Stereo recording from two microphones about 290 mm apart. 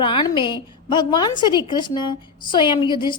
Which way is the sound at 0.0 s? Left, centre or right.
Centre.